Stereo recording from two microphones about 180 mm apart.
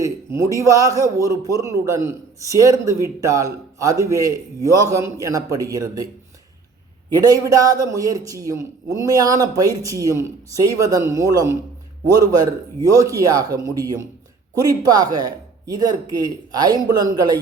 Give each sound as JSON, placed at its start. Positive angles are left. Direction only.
{"t": 0.0, "sound": "a man's voice", "side_deg": -15}
{"t": 7.1, "sound": "speech", "side_deg": -20}